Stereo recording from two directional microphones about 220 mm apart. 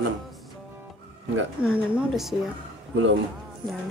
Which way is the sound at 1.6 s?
5° right (ahead or behind).